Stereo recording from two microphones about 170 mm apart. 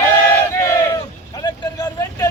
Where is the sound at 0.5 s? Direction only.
20° left (ahead or behind).